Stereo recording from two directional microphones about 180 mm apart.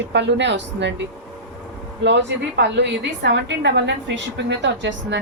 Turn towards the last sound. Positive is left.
turn(degrees=-85)